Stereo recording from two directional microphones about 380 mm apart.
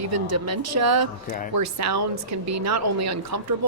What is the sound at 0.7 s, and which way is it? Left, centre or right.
A woman's voice, right.